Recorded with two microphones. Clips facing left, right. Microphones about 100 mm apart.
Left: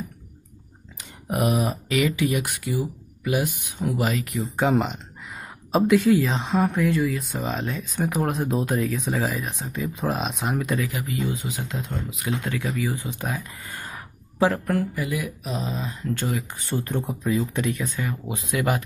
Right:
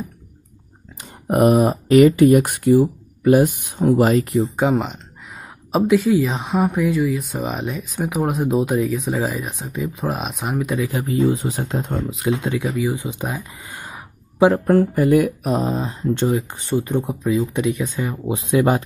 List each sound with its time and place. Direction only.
1.2 s speech: 45° right (ahead or behind)
4.6 s speech: 5° right (ahead or behind)
10.8 s speech: 30° right (ahead or behind); by 12.1 s 45° right (ahead or behind)
12.1 s speech: 30° right (ahead or behind)
12.4 s speech: 20° right (ahead or behind)
15.0 s speech: 50° right (ahead or behind); by 17.5 s 5° right (ahead or behind)
17.5 s speech: 15° right (ahead or behind); by 18.9 s 30° right (ahead or behind)